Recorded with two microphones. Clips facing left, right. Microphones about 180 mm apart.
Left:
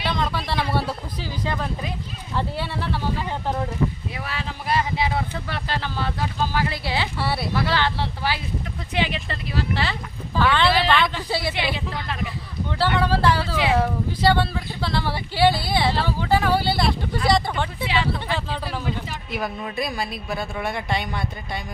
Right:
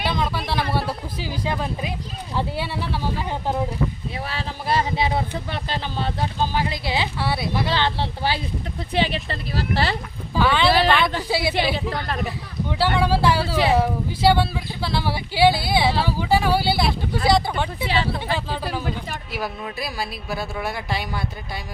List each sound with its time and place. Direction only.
0.0 s a sound: 5° right (ahead or behind)
1.2 s speech: 10° right (ahead or behind)
4.3 s speech: 30° right (ahead or behind)
7.2 s speech: centre (ahead or behind)
7.5 s speech: 20° right (ahead or behind); by 10.0 s 35° right (ahead or behind)
10.3 s speech: 5° right (ahead or behind)
11.5 s speech: 40° right (ahead or behind)
13.0 s speech: 10° right (ahead or behind)
17.8 s speech: 35° right (ahead or behind)
18.3 s speech: 5° right (ahead or behind)